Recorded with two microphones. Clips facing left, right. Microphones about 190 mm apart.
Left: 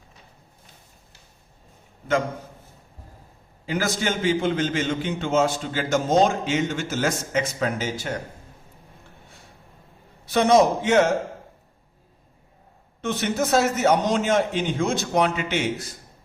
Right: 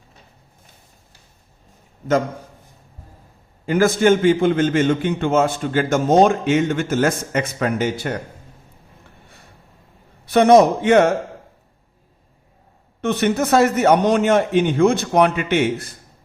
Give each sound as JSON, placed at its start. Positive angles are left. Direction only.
{"t": 3.7, "sound": "a man's voice", "side_deg": -55}
{"t": 10.2, "sound": "a man's voice", "side_deg": -60}
{"t": 13.0, "sound": "a man's voice", "side_deg": -60}